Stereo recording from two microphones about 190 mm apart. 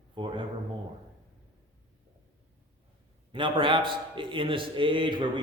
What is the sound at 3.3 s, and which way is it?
A man's voice, 25° right (ahead or behind).